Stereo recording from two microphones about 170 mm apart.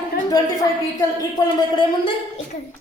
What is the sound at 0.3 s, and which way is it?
A woman's voice, 20° left (ahead or behind).